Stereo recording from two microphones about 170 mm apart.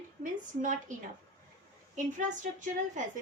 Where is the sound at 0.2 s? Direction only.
50° right (ahead or behind).